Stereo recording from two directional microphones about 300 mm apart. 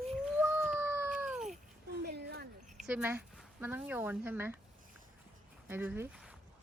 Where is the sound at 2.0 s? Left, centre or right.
Right.